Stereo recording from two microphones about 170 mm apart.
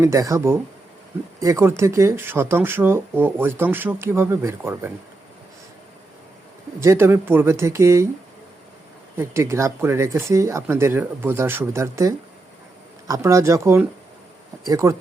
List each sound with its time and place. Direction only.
0.0 s speech: 20° right (ahead or behind)
6.7 s speech: 15° right (ahead or behind)
9.1 s speech: 15° right (ahead or behind)